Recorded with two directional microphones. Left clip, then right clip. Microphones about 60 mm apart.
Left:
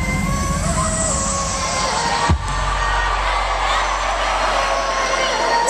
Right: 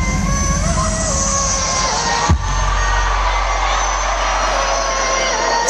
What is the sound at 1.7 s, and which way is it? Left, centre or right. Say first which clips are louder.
Crowd: even; right.